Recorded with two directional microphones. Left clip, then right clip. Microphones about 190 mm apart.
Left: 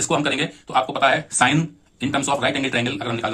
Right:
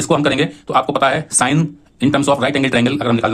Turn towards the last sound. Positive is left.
turn(degrees=-40)  # may be behind; listen again after turning